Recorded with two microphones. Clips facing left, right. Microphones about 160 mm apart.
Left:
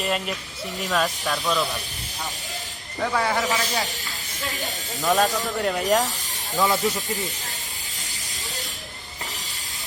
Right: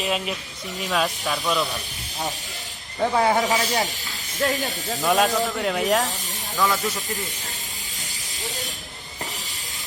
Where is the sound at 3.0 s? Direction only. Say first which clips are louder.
Right 4 dB; 25° right (ahead or behind).